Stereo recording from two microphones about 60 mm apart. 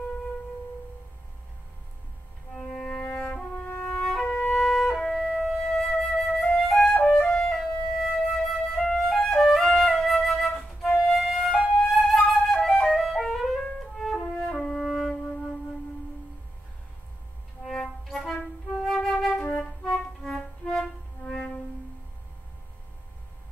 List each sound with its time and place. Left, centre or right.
2.7 s music: centre
3.0 s music: left
4.0 s music: centre
4.3 s music: left
4.6 s flute: centre
7.1 s music: centre
7.5 s flute: centre
11.2 s music: centre
11.8 s flute: centre
17.6 s music: centre
18.9 s flute: centre
19.8 s music: centre